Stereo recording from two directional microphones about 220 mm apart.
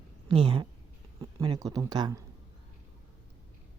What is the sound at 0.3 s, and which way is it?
Speech, 20° right (ahead or behind).